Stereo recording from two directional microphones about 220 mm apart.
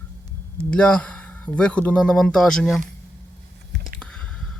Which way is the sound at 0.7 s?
5° left (ahead or behind).